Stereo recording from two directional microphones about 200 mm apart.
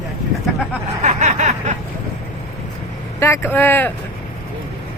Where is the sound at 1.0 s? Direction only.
35° right (ahead or behind).